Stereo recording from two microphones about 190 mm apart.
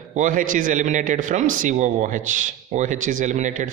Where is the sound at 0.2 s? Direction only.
45° right (ahead or behind).